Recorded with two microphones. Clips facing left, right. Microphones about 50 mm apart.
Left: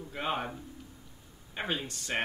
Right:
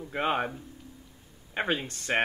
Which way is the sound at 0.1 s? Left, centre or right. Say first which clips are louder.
Right 6 dB; right.